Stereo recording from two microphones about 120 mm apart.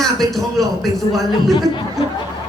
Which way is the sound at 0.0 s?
Centre (ahead or behind).